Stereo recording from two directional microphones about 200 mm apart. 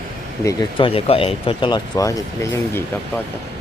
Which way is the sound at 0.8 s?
30° left (ahead or behind).